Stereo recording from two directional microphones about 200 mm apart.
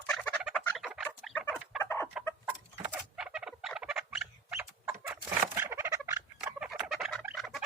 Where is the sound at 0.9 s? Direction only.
5° right (ahead or behind).